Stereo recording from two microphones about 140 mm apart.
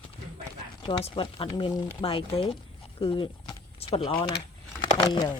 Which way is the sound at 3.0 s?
40° left (ahead or behind).